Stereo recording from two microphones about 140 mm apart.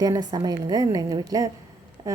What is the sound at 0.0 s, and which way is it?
A woman's voice, 30° right (ahead or behind).